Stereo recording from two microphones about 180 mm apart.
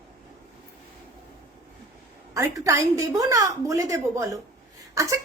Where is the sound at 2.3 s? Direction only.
15° right (ahead or behind).